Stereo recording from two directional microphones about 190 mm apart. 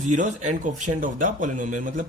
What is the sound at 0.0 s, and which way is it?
Speech, 40° right (ahead or behind).